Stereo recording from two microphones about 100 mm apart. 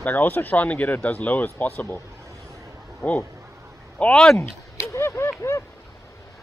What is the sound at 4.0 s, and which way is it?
Speech, 10° left (ahead or behind).